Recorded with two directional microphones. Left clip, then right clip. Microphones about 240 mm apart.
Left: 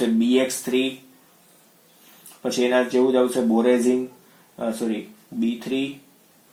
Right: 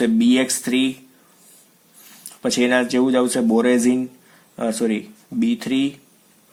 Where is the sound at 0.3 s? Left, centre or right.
Right.